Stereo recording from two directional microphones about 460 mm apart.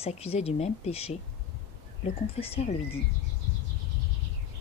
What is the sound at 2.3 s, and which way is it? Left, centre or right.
Speech, centre.